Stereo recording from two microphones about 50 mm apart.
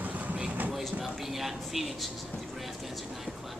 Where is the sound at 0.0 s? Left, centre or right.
Right.